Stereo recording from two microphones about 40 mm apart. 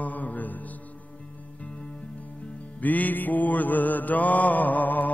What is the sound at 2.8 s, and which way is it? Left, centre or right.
Mantra, left.